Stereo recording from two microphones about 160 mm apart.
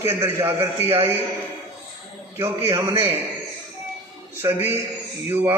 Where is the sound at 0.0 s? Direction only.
15° right (ahead or behind).